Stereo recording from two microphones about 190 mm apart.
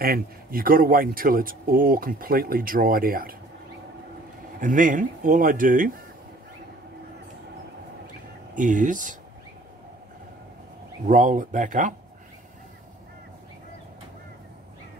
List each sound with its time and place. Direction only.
0.0 s speech: 50° right (ahead or behind)
4.6 s speech: 45° right (ahead or behind)
8.5 s speech: 45° right (ahead or behind)
11.1 s speech: 45° right (ahead or behind)